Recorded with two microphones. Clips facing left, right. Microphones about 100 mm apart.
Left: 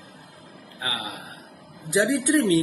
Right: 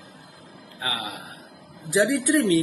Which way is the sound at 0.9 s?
30° left (ahead or behind).